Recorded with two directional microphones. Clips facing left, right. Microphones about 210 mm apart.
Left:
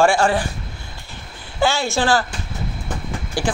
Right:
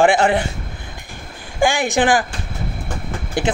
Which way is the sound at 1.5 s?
15° right (ahead or behind).